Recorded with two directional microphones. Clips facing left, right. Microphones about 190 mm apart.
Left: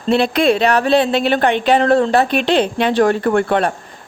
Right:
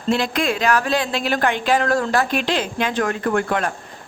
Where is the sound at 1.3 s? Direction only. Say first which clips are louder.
Left 5 dB; 25° left (ahead or behind).